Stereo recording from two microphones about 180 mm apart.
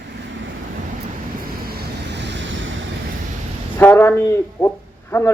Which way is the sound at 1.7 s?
75° right (ahead or behind).